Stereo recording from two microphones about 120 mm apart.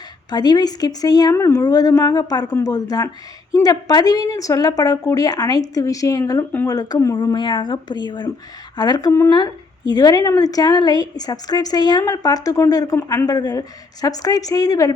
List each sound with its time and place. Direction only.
0.3 s a woman's voice: 35° left (ahead or behind)
7.2 s a woman's voice: 40° left (ahead or behind)